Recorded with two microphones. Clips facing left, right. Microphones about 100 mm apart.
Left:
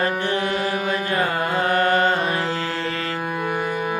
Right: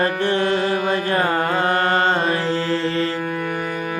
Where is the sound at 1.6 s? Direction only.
30° right (ahead or behind).